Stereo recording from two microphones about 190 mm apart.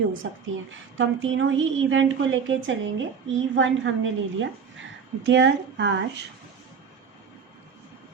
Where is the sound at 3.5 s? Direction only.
80° right.